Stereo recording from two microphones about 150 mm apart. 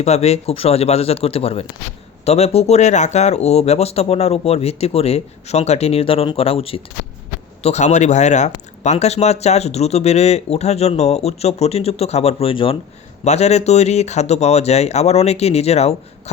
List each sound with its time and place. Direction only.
0.0 s speech: 45° left (ahead or behind)